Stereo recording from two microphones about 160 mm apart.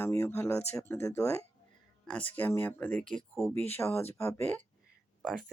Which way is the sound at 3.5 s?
15° left (ahead or behind).